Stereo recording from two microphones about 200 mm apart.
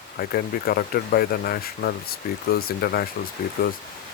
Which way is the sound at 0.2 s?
45° left (ahead or behind).